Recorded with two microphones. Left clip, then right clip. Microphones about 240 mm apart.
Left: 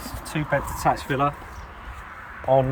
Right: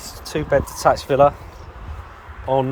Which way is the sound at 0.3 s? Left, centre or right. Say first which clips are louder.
Right 6 dB; centre.